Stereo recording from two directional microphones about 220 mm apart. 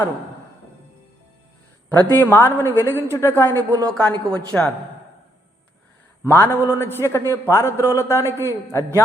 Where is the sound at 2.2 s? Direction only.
10° left (ahead or behind).